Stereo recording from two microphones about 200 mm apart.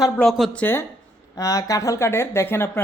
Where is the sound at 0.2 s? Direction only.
Centre (ahead or behind).